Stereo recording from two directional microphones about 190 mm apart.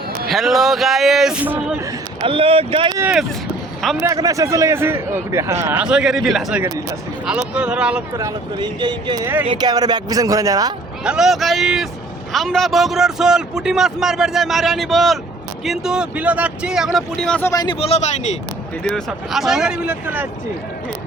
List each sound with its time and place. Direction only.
0.3 s a man's voice: centre (ahead or behind)
2.2 s speech: 30° right (ahead or behind)
3.0 s a man's voice: 5° right (ahead or behind)
4.0 s speech: 15° right (ahead or behind); by 6.6 s centre (ahead or behind)
6.6 s speech: 15° right (ahead or behind)
7.3 s a man's voice: 5° right (ahead or behind)
8.1 s speech: 20° right (ahead or behind)
11.0 s a man's voice: 5° right (ahead or behind)
17.5 s a man's voice: 20° left (ahead or behind)
18.8 s a man's voice: centre (ahead or behind)